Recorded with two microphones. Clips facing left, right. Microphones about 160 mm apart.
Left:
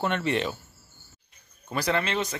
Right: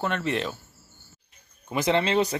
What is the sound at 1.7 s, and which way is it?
Speech, 20° right (ahead or behind).